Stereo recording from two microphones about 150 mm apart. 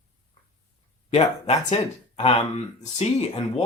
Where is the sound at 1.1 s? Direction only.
45° left (ahead or behind).